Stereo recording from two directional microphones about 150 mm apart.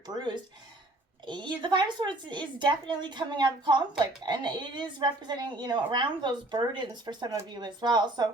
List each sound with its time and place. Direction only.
0.1 s a woman's voice: 30° right (ahead or behind)